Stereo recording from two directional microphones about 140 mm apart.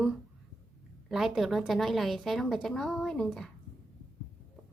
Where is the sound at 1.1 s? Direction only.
Centre (ahead or behind).